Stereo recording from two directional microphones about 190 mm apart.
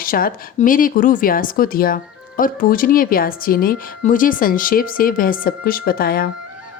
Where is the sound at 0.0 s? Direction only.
50° left (ahead or behind).